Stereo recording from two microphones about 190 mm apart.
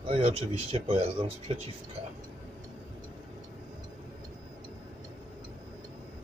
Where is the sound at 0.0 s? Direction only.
30° right (ahead or behind).